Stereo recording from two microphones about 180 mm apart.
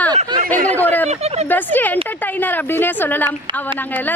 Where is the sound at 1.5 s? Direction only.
10° left (ahead or behind).